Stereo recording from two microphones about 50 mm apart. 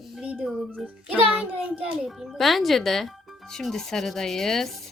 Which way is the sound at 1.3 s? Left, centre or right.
Right.